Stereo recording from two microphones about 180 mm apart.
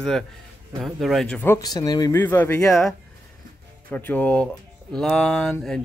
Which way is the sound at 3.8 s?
10° left (ahead or behind).